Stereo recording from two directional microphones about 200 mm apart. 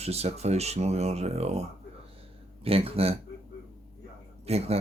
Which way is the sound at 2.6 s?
30° right (ahead or behind).